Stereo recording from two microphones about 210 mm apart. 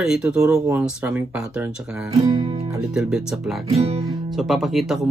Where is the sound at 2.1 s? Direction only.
20° right (ahead or behind).